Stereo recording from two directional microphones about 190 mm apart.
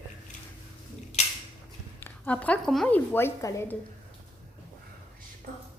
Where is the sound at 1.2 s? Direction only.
35° left (ahead or behind).